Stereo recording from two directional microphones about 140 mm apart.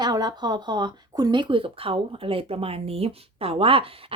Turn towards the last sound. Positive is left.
turn(degrees=-40)  # may be behind; listen again after turning